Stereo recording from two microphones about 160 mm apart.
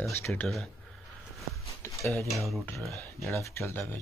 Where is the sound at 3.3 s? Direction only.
15° left (ahead or behind).